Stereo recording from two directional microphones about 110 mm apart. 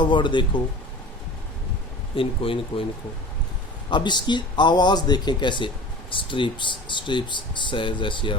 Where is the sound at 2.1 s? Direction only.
55° left (ahead or behind).